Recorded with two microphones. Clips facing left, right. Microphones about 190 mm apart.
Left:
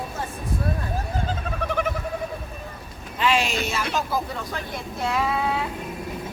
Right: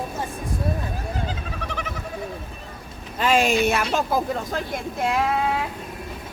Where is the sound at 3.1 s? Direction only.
45° right (ahead or behind).